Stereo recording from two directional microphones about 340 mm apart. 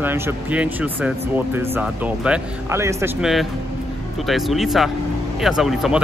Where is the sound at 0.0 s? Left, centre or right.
Centre.